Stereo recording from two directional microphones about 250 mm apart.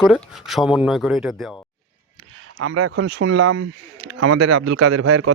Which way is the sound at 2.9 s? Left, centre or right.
Right.